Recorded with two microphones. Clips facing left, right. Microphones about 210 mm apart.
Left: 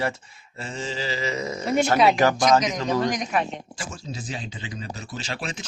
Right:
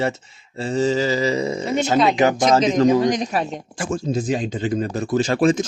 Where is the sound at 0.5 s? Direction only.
35° right (ahead or behind).